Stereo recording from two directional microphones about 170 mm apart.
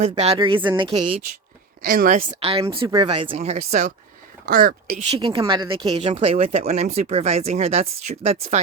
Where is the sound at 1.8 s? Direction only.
55° right (ahead or behind).